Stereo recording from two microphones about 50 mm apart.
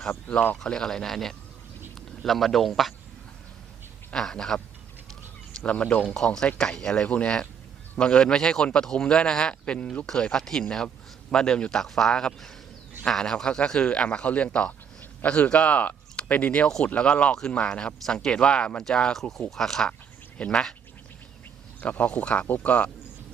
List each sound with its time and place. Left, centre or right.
0.5 s a man's voice: centre
4.1 s speech: centre
5.6 s speech: left
6.1 s speech: centre
21.8 s speech: left
22.4 s speech: left